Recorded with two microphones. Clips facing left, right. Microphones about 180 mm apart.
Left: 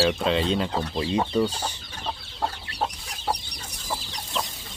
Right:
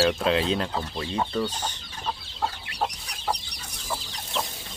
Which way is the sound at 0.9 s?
15° left (ahead or behind).